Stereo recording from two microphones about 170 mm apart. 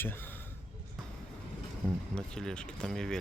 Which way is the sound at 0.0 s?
10° left (ahead or behind).